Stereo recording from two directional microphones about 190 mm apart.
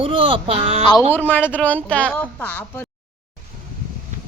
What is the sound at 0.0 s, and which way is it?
Speech, 25° right (ahead or behind).